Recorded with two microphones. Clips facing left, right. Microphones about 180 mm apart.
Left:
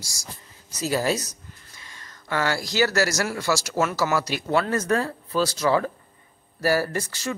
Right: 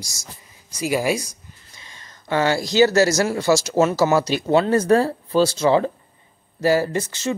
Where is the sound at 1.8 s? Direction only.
25° right (ahead or behind).